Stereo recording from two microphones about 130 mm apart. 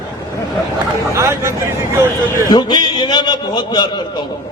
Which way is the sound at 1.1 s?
20° right (ahead or behind).